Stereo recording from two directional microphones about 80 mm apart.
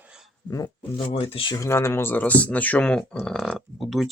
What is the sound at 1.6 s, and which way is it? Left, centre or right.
Speech, left.